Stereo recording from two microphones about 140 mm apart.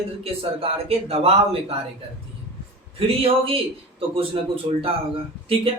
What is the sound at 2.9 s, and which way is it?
Speech, 45° right (ahead or behind).